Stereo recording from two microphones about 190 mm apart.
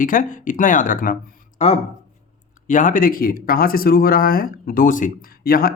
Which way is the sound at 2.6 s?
40° left (ahead or behind).